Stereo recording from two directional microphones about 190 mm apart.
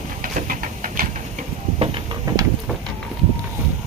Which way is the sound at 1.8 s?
25° right (ahead or behind).